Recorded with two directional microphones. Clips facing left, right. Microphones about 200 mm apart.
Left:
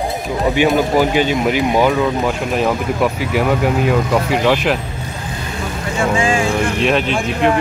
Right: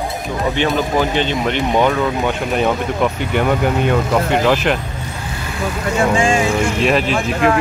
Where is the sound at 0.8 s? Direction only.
10° left (ahead or behind).